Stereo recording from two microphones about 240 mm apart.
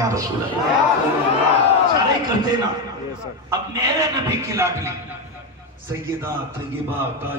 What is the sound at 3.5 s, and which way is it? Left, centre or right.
Speech, centre.